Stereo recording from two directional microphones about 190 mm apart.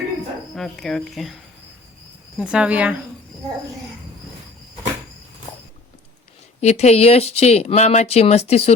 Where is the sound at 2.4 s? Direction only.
5° right (ahead or behind).